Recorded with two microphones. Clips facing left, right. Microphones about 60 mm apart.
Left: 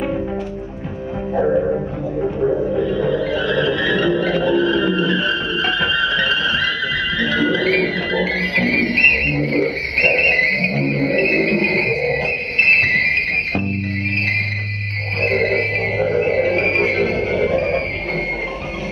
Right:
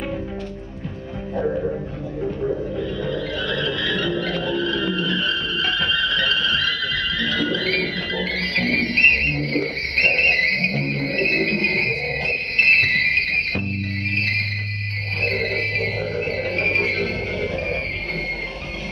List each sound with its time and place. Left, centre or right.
1.4 s music: left
2.6 s music: centre
15.2 s music: centre